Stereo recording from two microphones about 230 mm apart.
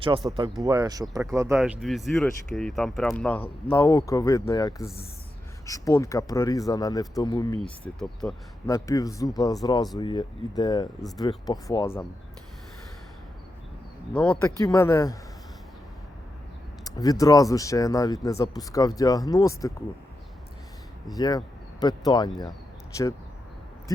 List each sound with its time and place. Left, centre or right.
0.6 s speech: centre
7.6 s speech: centre
8.6 s speech: centre
14.1 s speech: centre
16.8 s speech: centre
21.1 s speech: centre